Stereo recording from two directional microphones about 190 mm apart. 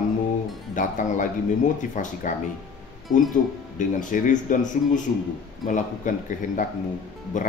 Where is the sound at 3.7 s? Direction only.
45° left (ahead or behind).